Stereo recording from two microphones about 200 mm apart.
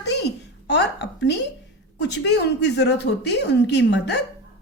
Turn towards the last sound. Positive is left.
turn(degrees=60)  # may be behind; listen again after turning